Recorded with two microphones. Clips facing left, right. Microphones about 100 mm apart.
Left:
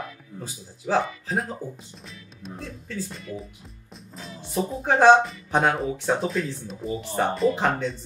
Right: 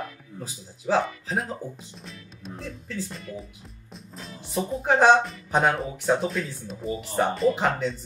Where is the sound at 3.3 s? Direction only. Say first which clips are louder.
Left 2 dB; 50° right (ahead or behind).